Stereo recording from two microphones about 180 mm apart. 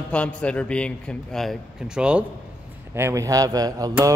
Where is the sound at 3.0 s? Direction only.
15° right (ahead or behind).